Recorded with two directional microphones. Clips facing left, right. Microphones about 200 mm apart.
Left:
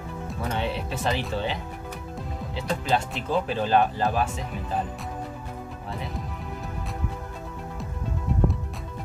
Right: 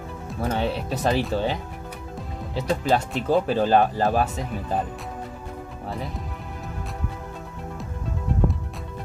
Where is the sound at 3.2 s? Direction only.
40° right (ahead or behind).